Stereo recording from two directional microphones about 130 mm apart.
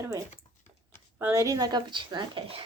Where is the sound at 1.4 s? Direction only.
30° right (ahead or behind).